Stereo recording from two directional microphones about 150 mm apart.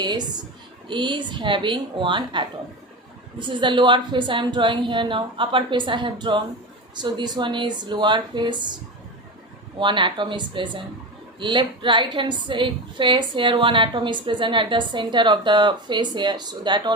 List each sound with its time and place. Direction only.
0.9 s a woman's voice: 30° right (ahead or behind)
9.8 s a woman's voice: 35° right (ahead or behind)